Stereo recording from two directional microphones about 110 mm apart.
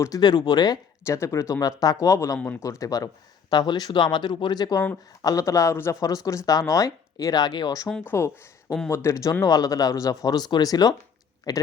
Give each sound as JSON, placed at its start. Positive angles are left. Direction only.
{"t": 0.0, "sound": "speech", "side_deg": 35}
{"t": 2.4, "sound": "speech", "side_deg": 15}
{"t": 2.6, "sound": "speech", "side_deg": 30}
{"t": 8.0, "sound": "speech", "side_deg": 25}